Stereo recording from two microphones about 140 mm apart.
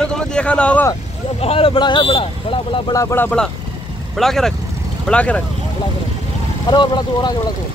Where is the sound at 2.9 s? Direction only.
20° left (ahead or behind).